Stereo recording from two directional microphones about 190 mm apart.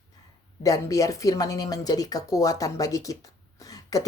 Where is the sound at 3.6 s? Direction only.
20° left (ahead or behind).